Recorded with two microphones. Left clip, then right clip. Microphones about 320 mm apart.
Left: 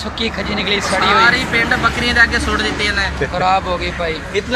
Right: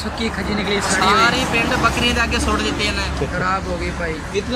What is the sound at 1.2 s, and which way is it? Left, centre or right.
Speech, centre.